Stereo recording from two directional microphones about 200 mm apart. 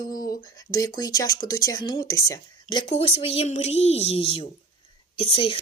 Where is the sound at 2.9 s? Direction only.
30° left (ahead or behind).